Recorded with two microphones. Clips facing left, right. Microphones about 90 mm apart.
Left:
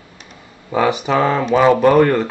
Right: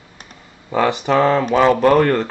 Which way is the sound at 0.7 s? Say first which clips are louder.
Even; 10° left (ahead or behind).